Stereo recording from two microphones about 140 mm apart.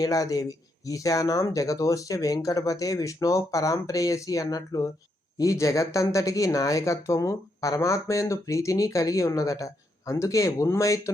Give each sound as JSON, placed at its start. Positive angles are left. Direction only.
{"t": 0.0, "sound": "speech", "side_deg": 25}